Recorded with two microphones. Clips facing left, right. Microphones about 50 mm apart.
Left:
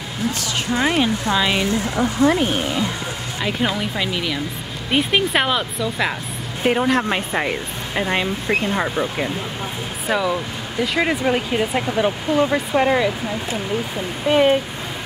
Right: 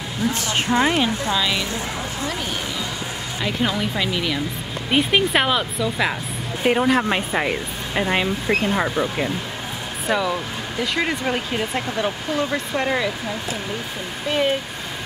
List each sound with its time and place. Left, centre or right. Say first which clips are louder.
0.7 s speech: left 1 dB; centre
1.3 s speech: left 4 dB; left
3.4 s speech: left 1 dB; centre
14.2 s speech: left 6 dB; centre